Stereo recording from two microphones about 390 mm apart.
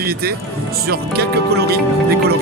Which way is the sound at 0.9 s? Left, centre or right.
Right.